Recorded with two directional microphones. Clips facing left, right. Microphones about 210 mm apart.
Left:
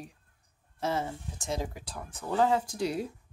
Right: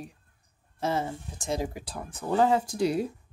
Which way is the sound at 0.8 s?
35° right (ahead or behind).